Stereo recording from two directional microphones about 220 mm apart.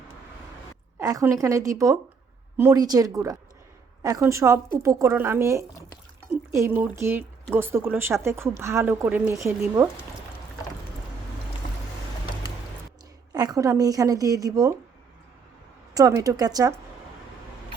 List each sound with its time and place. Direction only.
0.9 s speech: 15° right (ahead or behind)
13.3 s speech: 15° right (ahead or behind)
16.0 s speech: 15° right (ahead or behind)